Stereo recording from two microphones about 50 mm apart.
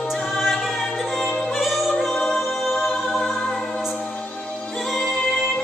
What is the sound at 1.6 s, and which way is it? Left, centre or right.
Music, centre.